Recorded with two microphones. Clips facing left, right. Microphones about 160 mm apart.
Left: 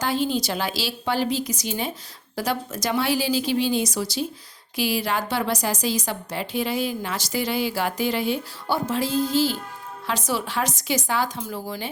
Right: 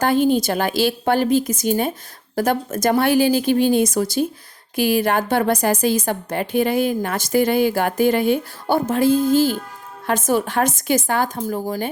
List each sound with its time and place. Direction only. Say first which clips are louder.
0.0 s a woman's voice: right 7 dB; 55° right (ahead or behind)